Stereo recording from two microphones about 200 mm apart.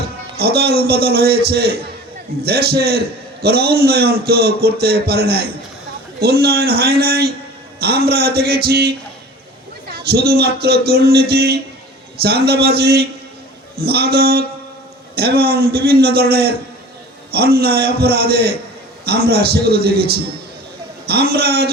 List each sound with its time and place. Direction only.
0.3 s a man's voice: 50° right (ahead or behind)
9.9 s a man's voice: 50° right (ahead or behind)